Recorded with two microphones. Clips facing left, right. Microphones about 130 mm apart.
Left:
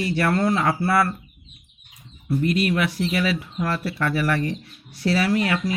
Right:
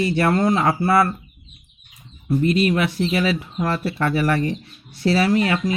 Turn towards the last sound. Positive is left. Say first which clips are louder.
# right 3 dB
turn(degrees=-25)  # may be behind; listen again after turning